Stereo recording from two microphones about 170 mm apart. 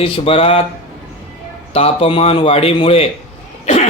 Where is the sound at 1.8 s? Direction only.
35° left (ahead or behind).